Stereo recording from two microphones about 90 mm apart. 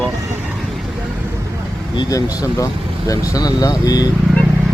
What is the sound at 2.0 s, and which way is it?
Speech, 40° left (ahead or behind).